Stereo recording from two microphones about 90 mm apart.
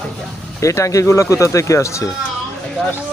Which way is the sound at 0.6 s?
35° left (ahead or behind).